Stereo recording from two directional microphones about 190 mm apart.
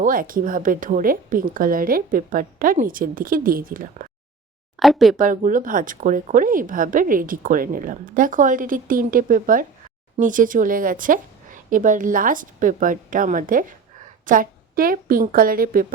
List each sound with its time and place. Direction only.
0.0 s speech: 45° right (ahead or behind)
4.8 s speech: centre (ahead or behind)
5.1 s speech: 45° right (ahead or behind)